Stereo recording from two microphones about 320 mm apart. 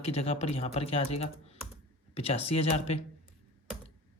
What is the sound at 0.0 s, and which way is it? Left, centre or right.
Speech, centre.